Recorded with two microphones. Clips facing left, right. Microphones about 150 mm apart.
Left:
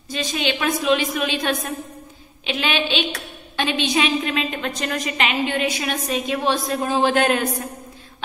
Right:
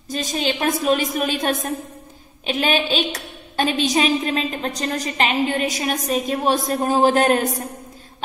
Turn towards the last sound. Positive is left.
turn(degrees=-40)  # may be behind; listen again after turning